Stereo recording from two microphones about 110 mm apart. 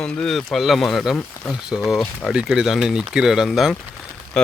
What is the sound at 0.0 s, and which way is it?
Speech, 5° left (ahead or behind).